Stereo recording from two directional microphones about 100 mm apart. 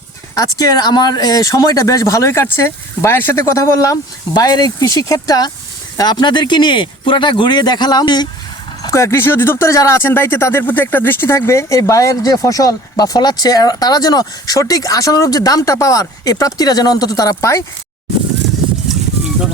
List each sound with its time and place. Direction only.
0.3 s speech: 40° left (ahead or behind)
4.4 s speech: 45° left (ahead or behind)
8.8 s speech: 30° left (ahead or behind)
18.9 s a sound: 5° right (ahead or behind)